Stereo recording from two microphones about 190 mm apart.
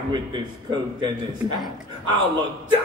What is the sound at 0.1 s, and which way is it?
Speech, 25° right (ahead or behind).